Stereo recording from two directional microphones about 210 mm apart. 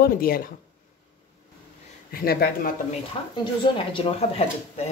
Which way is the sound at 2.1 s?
45° left (ahead or behind).